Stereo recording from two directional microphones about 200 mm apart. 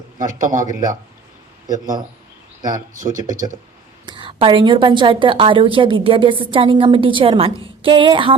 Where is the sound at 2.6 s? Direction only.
20° right (ahead or behind).